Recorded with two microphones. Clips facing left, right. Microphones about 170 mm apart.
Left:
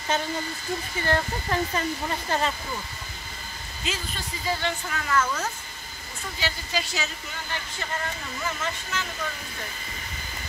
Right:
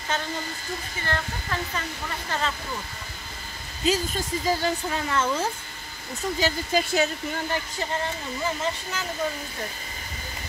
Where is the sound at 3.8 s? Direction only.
40° right (ahead or behind).